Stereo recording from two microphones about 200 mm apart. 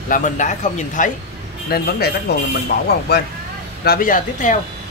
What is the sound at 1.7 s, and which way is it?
Speech, 50° left (ahead or behind).